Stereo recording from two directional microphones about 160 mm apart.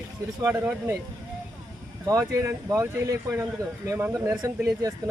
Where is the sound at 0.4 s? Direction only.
15° right (ahead or behind).